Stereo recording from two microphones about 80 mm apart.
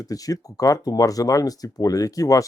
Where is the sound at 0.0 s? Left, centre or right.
Left.